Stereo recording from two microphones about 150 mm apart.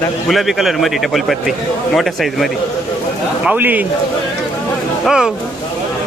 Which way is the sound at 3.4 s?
10° right (ahead or behind).